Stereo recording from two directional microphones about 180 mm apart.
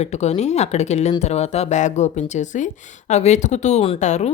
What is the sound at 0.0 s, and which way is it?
A woman's voice, 40° left (ahead or behind).